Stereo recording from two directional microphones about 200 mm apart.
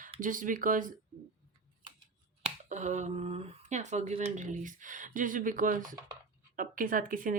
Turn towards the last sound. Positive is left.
turn(degrees=-45)  # may be behind; listen again after turning